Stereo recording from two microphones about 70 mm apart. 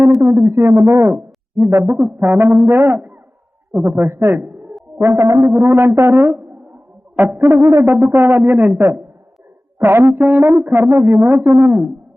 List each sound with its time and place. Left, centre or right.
0.3 s speech: right
2.2 s music: right
2.6 s speech: right
3.7 s a man's voice: right
4.9 s speech: right
8.2 s speech: right